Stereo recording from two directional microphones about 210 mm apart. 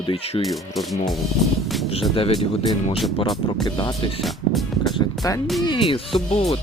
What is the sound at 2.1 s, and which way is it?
Speech, 25° left (ahead or behind).